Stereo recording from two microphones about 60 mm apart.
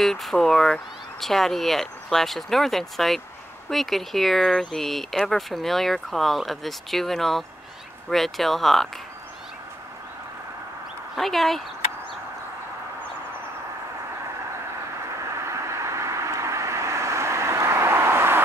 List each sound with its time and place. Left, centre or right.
0.0 s speech: centre
11.1 s speech: centre
15.1 s vehicle: right